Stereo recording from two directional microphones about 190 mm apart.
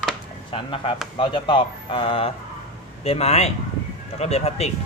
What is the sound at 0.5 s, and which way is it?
Speech, 25° left (ahead or behind).